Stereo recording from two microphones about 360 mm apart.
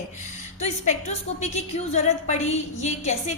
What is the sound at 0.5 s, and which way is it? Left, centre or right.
A woman's voice, centre.